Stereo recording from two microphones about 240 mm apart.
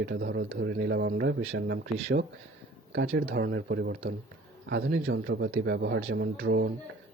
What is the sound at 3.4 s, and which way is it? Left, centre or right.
Speech, right.